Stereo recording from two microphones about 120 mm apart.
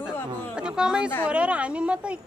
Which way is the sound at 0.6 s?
5° right (ahead or behind).